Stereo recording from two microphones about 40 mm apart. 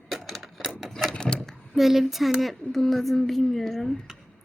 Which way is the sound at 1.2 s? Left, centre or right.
Left.